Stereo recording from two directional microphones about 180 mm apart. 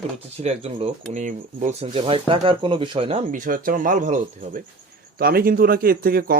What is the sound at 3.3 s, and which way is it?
Speech, 50° right (ahead or behind).